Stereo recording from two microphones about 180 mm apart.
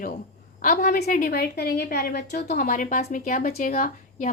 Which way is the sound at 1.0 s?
50° left (ahead or behind).